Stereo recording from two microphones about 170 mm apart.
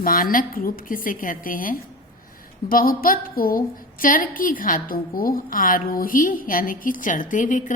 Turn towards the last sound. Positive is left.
turn(degrees=50)  # may be behind; listen again after turning